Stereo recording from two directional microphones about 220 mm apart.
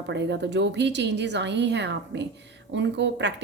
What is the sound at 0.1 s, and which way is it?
Speech, 55° right (ahead or behind).